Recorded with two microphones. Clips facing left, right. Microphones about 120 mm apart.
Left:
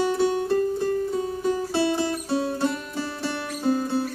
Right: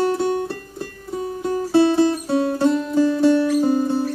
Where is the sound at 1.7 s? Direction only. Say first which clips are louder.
Right 8 dB; 50° right (ahead or behind).